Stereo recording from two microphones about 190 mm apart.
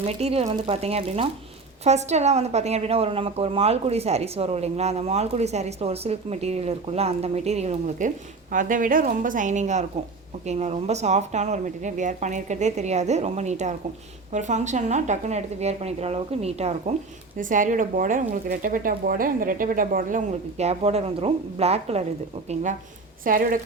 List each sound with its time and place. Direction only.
0.0 s a woman's voice: 30° right (ahead or behind)
23.2 s speech: 45° right (ahead or behind)